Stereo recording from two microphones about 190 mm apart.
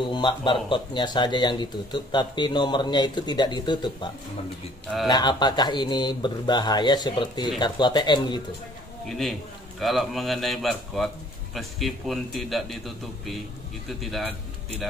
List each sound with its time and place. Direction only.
0.0 s speech: 25° left (ahead or behind)
9.1 s a man's voice: centre (ahead or behind)